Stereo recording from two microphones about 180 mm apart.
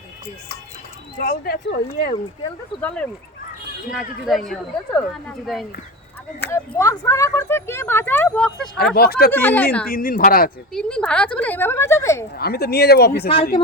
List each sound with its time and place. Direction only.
1.2 s speech: 55° left (ahead or behind)
2.8 s speech: 10° left (ahead or behind)
6.5 s speech: 15° left (ahead or behind)
9.0 s speech: 55° left (ahead or behind)
9.3 s speech: 10° left (ahead or behind)
9.9 s speech: 50° left (ahead or behind)
10.7 s speech: 5° left (ahead or behind)
12.4 s speech: 60° left (ahead or behind)
13.2 s speech: 30° left (ahead or behind)